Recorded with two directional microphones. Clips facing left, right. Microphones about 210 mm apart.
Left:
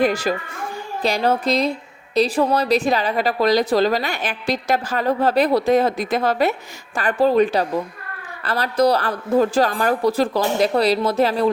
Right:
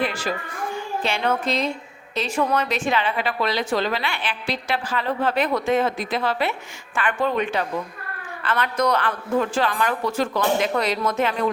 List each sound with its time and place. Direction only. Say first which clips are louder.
0.0 s a woman's voice: left 6 dB; 40° left (ahead or behind)